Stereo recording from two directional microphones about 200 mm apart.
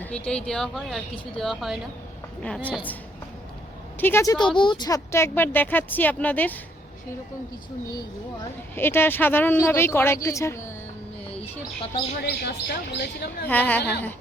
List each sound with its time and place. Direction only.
0.0 s speech: 5° left (ahead or behind)
4.0 s speech: 15° left (ahead or behind)
8.7 s speech: 10° left (ahead or behind)
12.2 s speech: 55° left (ahead or behind)
13.5 s speech: 10° left (ahead or behind)